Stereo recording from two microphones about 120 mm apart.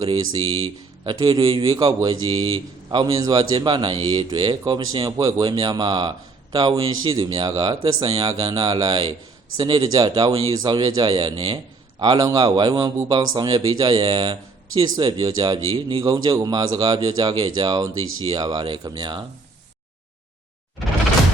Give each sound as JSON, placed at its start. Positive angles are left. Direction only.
{"t": 0.0, "sound": "a man's voice", "side_deg": -45}